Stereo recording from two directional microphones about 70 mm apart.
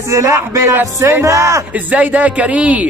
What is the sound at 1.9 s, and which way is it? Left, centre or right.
Speech, right.